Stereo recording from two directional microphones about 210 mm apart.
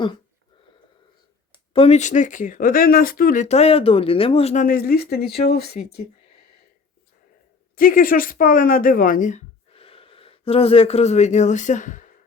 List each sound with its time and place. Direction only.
1.7 s speech: 30° left (ahead or behind); by 5.7 s 50° left (ahead or behind)
7.8 s speech: 40° left (ahead or behind)